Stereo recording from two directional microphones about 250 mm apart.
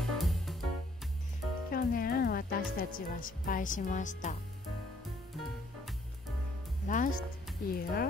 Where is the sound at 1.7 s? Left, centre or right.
Left.